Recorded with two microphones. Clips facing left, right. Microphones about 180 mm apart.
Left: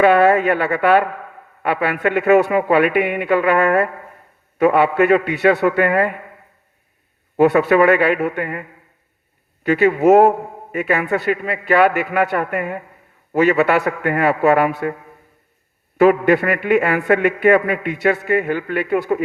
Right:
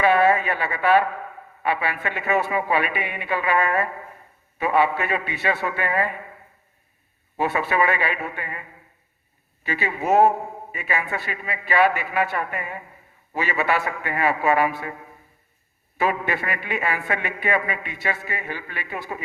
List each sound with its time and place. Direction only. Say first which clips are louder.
0.0 s a man's voice: left 6 dB; 60° left (ahead or behind)
7.8 s a man's voice: left 9 dB; 60° left (ahead or behind)
9.7 s a man's voice: left 8 dB; 60° left (ahead or behind)
16.0 s a man's voice: left 11 dB; 60° left (ahead or behind)